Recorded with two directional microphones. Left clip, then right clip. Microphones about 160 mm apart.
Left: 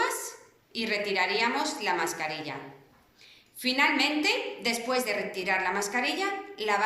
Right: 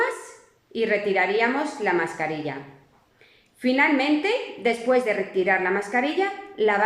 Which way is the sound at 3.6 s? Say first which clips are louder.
Right 4 dB; 35° right (ahead or behind).